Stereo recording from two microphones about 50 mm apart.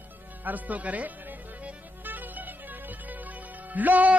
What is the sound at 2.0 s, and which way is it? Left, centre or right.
Music, right.